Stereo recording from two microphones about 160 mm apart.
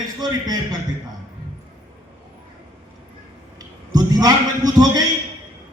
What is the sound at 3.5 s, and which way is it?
A man's voice, 25° right (ahead or behind).